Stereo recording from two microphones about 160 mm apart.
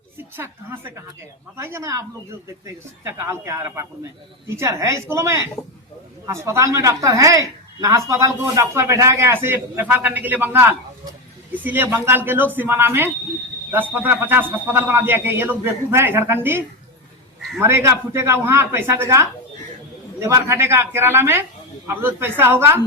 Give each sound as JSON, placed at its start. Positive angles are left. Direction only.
{"t": 0.2, "sound": "a woman's voice", "side_deg": -15}